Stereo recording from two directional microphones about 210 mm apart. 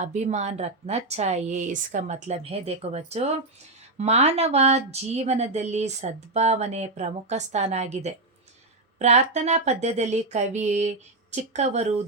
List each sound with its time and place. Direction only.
0.0 s speech: 35° right (ahead or behind)